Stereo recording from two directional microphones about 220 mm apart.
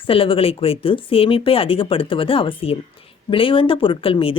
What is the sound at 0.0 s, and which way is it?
Speech, 25° left (ahead or behind).